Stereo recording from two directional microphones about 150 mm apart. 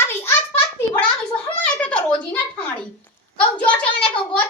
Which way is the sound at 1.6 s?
5° left (ahead or behind).